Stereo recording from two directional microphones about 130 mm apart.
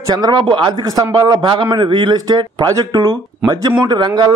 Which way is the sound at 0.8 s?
30° right (ahead or behind).